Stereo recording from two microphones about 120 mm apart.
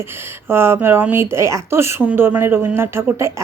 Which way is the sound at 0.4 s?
20° right (ahead or behind).